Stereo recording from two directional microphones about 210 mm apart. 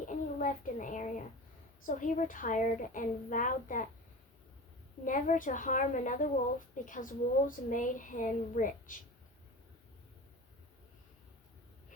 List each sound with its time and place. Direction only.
0.0 s a sound: 40° left (ahead or behind)
1.8 s a child's voice: 35° left (ahead or behind)
5.0 s a child's voice: 40° left (ahead or behind)